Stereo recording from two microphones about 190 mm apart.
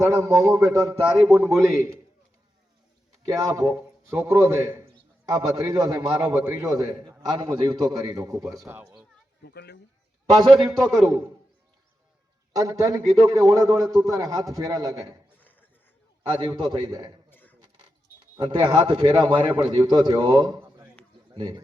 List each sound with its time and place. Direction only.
0.1 s a man's voice: 20° right (ahead or behind)
3.2 s a man's voice: 20° right (ahead or behind)
9.4 s speech: 60° left (ahead or behind)
10.3 s a man's voice: 20° right (ahead or behind)
10.8 s a man's voice: centre (ahead or behind)
12.5 s a man's voice: 20° right (ahead or behind)
16.4 s a man's voice: 25° right (ahead or behind)
17.2 s a sound: 10° left (ahead or behind)
18.3 s a man's voice: 25° right (ahead or behind)